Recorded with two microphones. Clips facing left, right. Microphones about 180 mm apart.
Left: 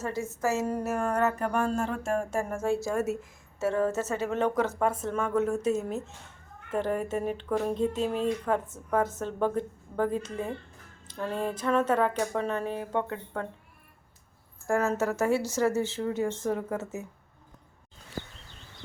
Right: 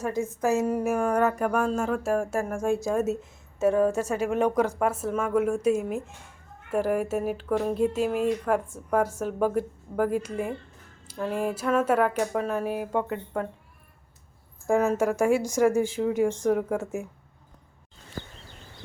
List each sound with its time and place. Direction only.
0.0 s speech: 15° right (ahead or behind)
14.7 s speech: 15° right (ahead or behind)